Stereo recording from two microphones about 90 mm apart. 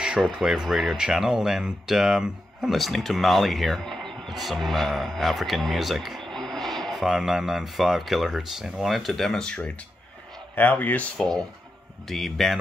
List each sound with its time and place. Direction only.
0.2 s speech: 5° right (ahead or behind); by 11.1 s 15° left (ahead or behind)
11.1 s speech: 5° left (ahead or behind)